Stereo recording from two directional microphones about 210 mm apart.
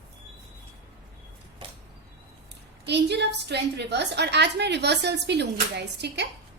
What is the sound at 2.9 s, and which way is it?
A woman's voice, 55° right (ahead or behind).